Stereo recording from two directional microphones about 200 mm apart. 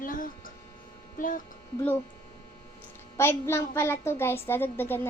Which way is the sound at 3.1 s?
10° left (ahead or behind).